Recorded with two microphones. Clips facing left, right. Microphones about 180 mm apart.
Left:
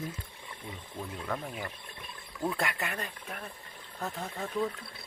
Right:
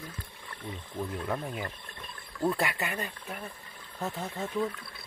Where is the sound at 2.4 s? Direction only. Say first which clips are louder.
Right 3 dB; centre (ahead or behind).